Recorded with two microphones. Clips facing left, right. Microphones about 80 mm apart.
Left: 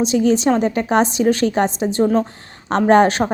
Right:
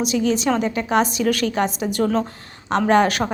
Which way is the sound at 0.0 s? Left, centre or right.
Left.